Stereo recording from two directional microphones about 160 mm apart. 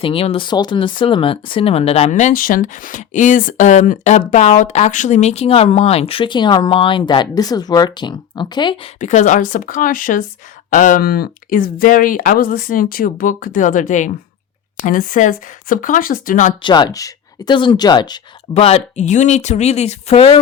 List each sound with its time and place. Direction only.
0.0 s speech: 35° left (ahead or behind)
9.0 s speech: 50° left (ahead or behind)
16.6 s speech: 25° left (ahead or behind)
18.5 s speech: 40° left (ahead or behind)